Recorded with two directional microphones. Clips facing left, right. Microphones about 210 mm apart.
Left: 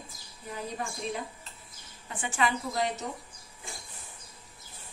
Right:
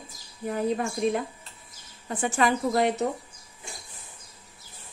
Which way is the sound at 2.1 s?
40° right (ahead or behind).